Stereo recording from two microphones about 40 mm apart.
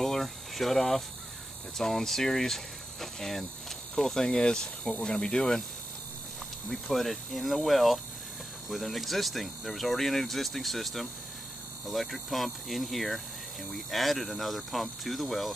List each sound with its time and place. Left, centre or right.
0.0 s hum: centre
1.8 s speech: centre
5.4 s speech: centre
6.7 s speech: centre